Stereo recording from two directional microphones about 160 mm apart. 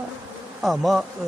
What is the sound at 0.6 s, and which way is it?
Speech, centre (ahead or behind).